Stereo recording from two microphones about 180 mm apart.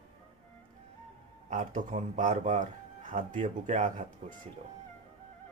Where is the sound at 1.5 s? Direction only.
40° right (ahead or behind).